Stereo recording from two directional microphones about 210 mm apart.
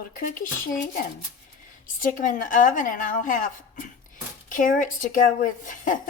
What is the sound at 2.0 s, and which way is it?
Speech, 40° left (ahead or behind).